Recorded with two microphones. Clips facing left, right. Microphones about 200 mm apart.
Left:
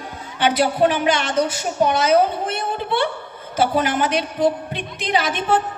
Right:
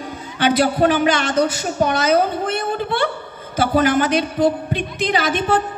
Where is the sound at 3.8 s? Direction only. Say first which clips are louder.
Right 4 dB; 40° right (ahead or behind).